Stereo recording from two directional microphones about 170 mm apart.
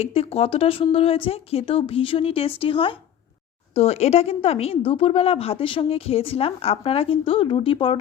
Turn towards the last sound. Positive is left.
turn(degrees=30)  # may be behind; listen again after turning